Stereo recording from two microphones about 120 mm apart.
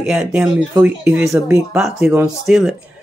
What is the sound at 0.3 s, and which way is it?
Speech, 10° right (ahead or behind).